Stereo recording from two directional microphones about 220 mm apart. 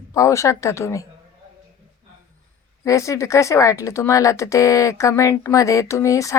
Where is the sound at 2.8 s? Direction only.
15° left (ahead or behind).